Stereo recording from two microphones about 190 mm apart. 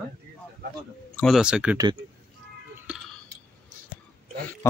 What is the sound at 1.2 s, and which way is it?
Speech, centre (ahead or behind).